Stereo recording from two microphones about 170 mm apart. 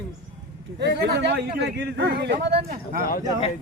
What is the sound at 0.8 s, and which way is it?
Speech, 85° right.